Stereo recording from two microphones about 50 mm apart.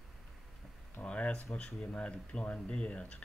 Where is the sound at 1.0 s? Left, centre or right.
Centre.